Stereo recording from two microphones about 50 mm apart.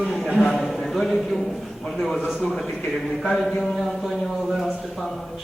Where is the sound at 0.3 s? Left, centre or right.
Centre.